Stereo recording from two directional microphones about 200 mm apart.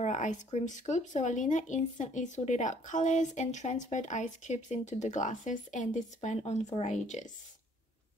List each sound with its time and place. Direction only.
0.0 s speech: 35° left (ahead or behind)